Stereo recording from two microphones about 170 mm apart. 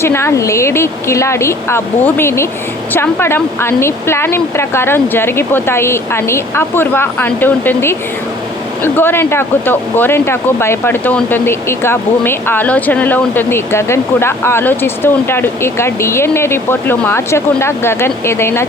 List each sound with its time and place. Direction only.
0.0 s speech: 15° left (ahead or behind)